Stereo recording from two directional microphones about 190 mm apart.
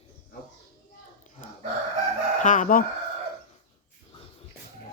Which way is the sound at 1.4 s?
45° left (ahead or behind).